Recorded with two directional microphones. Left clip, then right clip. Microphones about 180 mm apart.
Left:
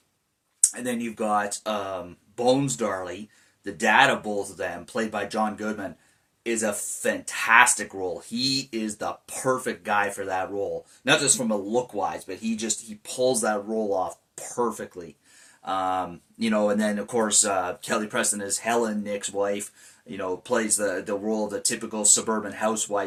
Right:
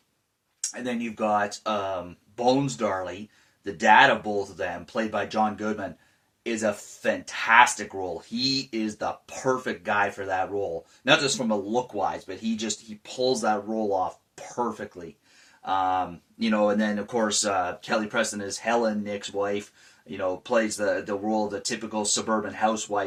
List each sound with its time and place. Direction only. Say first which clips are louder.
0.7 s speech: left 1 dB; 15° left (ahead or behind)